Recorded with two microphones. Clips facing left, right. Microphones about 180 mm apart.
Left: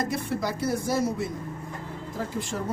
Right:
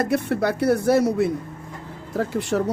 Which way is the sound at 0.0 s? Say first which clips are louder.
Right 7 dB; 65° right (ahead or behind).